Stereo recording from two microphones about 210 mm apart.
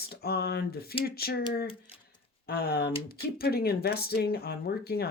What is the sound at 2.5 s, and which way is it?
Speech, 50° left (ahead or behind).